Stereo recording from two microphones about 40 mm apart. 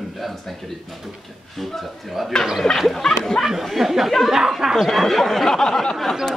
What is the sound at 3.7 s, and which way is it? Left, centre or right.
Speech, centre.